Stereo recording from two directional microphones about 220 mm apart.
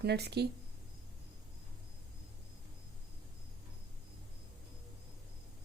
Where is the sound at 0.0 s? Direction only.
50° right (ahead or behind).